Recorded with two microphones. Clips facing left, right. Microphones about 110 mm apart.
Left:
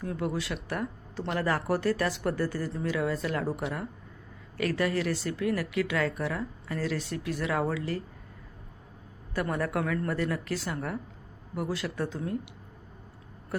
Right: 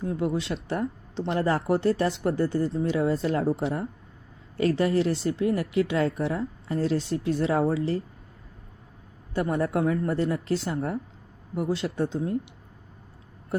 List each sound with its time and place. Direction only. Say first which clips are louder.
0.0 s speech: right 4 dB; 25° right (ahead or behind)
9.3 s speech: right 4 dB; 25° right (ahead or behind)